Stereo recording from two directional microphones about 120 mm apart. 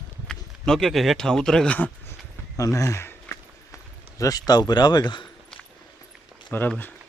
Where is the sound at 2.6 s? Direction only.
30° left (ahead or behind).